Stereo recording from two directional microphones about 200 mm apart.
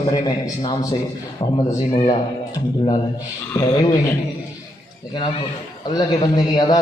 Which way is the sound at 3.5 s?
15° left (ahead or behind).